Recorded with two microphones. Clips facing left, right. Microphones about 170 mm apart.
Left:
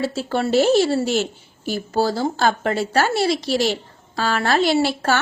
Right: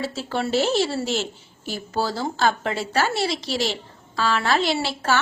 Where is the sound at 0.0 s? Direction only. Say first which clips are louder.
Left 4 dB; 50° left (ahead or behind).